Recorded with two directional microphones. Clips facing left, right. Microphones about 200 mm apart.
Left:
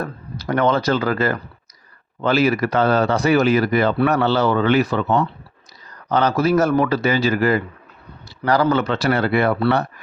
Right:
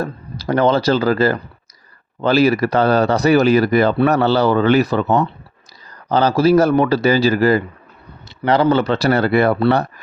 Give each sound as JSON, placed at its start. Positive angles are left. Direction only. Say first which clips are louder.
{"t": 0.0, "sound": "speech", "louder": "right 3 dB", "side_deg": -30}
{"t": 8.7, "sound": "speech", "louder": "right 3 dB", "side_deg": -35}